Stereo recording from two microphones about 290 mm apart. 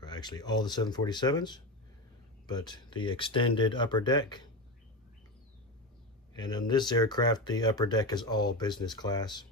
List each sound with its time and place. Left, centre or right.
0.0 s speech: centre
6.3 s speech: centre